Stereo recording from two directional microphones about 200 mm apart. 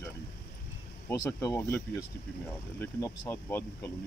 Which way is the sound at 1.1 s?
15° left (ahead or behind).